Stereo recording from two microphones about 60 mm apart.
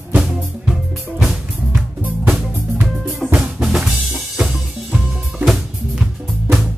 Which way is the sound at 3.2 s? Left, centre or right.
Centre.